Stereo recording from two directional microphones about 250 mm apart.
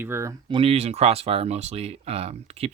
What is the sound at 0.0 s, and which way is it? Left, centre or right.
Speech, centre.